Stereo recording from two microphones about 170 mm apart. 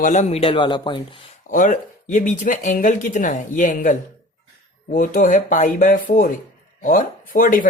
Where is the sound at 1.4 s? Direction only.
50° left (ahead or behind).